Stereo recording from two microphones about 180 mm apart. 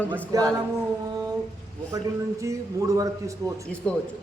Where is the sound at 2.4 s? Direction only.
15° right (ahead or behind).